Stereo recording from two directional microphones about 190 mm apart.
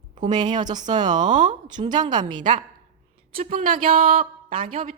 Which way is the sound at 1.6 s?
25° right (ahead or behind).